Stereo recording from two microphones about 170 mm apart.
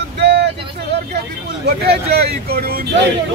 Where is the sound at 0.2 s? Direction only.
80° right.